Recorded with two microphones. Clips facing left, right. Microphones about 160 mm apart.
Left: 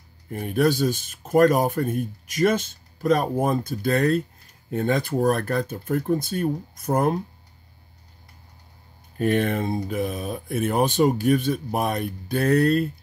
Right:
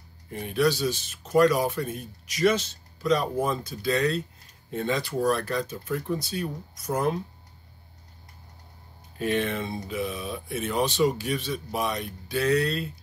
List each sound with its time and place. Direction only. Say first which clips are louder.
0.3 s speech: left 3 dB; 50° left (ahead or behind)
9.2 s speech: left 5 dB; 50° left (ahead or behind)